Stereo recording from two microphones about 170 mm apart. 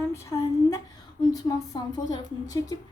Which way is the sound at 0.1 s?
15° left (ahead or behind).